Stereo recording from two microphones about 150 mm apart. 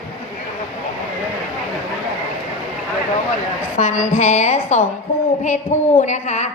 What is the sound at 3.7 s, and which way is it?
A woman's voice, 55° left (ahead or behind).